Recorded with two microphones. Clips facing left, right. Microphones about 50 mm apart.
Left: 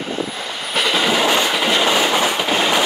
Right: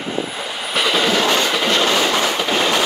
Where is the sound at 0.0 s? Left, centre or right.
Centre.